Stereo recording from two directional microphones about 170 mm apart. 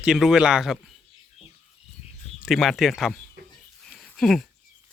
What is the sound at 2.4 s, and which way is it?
Speech, centre (ahead or behind).